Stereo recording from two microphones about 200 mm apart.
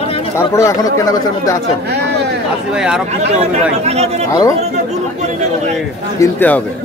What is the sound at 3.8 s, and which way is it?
Speech, 30° right (ahead or behind).